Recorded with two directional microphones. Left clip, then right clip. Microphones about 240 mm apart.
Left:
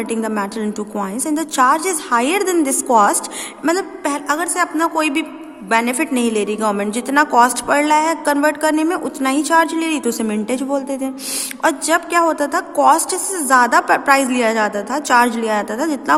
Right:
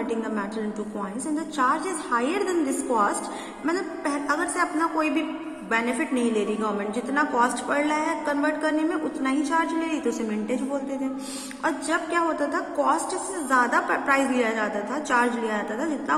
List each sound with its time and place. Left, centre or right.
0.0 s a woman's voice: left